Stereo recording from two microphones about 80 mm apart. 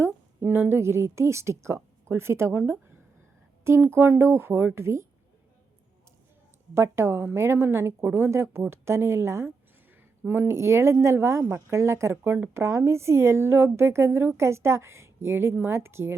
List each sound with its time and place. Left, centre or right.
0.0 s a woman's voice: right
3.8 s speech: right
6.7 s speech: right